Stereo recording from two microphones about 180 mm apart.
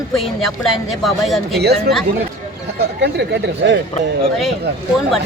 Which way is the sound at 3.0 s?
70° right (ahead or behind).